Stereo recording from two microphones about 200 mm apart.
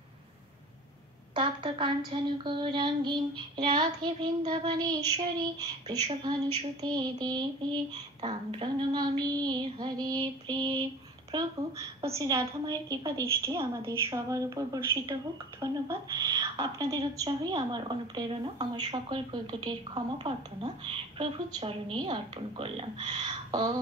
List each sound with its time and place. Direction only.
1.3 s a woman's voice: 25° right (ahead or behind)
12.2 s a woman's voice: 15° right (ahead or behind)